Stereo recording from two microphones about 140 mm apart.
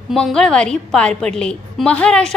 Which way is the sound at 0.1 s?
5° left (ahead or behind).